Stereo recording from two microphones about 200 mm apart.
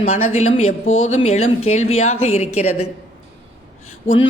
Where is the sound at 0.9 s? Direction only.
80° left.